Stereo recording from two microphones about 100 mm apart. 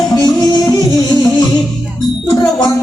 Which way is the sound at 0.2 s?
45° left (ahead or behind).